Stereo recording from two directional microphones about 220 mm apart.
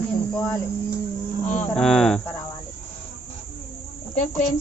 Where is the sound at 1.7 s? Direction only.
Centre (ahead or behind).